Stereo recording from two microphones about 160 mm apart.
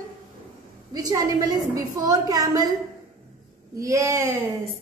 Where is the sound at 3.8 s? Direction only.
20° right (ahead or behind).